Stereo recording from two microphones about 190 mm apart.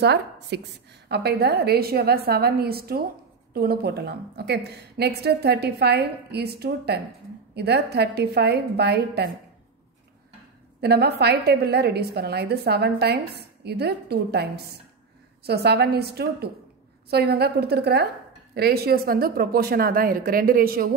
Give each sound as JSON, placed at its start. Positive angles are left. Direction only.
{"t": 0.0, "sound": "a woman's voice", "side_deg": -60}
{"t": 10.8, "sound": "a woman's voice", "side_deg": -60}